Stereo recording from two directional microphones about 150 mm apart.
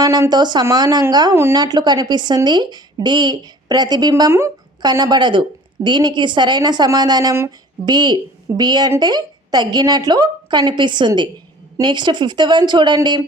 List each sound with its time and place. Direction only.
0.0 s speech: 25° right (ahead or behind)
4.1 s a woman's voice: 15° right (ahead or behind)